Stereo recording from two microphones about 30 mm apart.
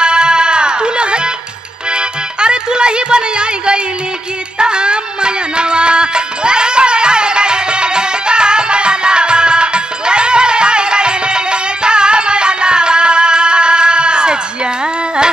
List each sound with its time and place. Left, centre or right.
0.0 s music: right